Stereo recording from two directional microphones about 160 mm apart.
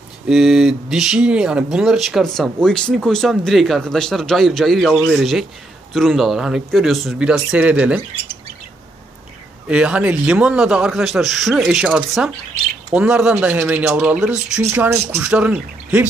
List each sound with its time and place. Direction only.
0.3 s speech: 5° right (ahead or behind)
9.7 s speech: 5° right (ahead or behind)